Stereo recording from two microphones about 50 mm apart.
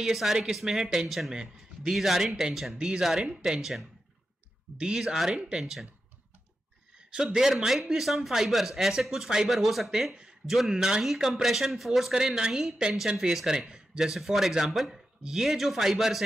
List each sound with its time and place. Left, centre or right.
0.0 s speech: centre
4.7 s speech: centre
7.3 s speech: centre